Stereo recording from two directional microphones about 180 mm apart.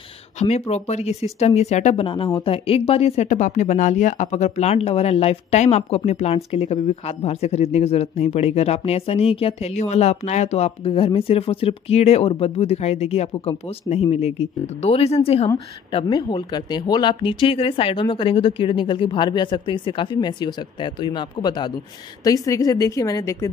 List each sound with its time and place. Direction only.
0.4 s a woman's voice: 35° left (ahead or behind); by 23.5 s 15° left (ahead or behind)